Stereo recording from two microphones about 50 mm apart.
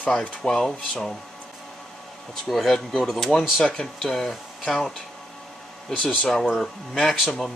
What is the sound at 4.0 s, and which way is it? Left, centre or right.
Speech, centre.